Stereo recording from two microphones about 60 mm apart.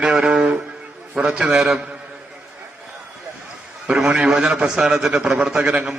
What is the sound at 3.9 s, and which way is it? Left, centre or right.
A man's voice, centre.